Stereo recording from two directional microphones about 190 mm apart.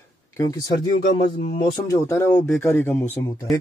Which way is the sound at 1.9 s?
15° left (ahead or behind).